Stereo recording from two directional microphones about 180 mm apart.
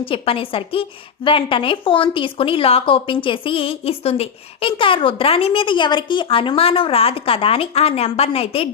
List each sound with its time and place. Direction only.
0.0 s a woman's voice: 30° left (ahead or behind)